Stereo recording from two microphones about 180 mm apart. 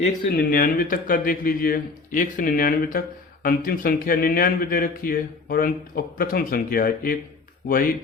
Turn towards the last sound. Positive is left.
turn(degrees=50)  # may be behind; listen again after turning